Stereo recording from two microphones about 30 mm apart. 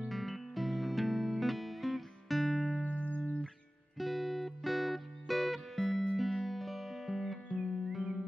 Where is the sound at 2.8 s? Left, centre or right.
Left.